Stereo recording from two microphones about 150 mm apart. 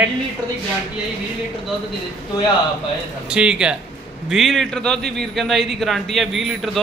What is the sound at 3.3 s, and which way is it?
A man's voice, 5° right (ahead or behind).